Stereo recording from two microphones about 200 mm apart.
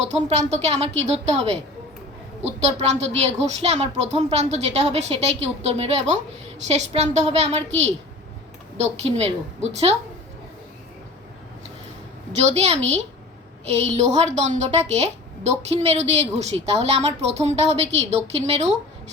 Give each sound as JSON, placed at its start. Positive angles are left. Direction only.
{"t": 0.0, "sound": "a woman's voice", "side_deg": -35}
{"t": 12.3, "sound": "a woman's voice", "side_deg": -35}